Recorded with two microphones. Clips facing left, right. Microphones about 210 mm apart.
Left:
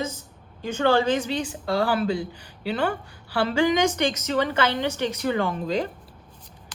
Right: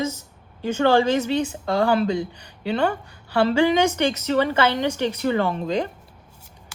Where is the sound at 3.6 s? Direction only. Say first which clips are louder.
Right 2 dB; 10° right (ahead or behind).